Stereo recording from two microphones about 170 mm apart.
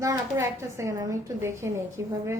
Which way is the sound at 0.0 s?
20° right (ahead or behind).